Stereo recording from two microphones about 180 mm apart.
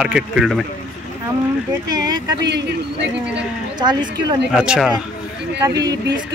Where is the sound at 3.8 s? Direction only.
25° right (ahead or behind).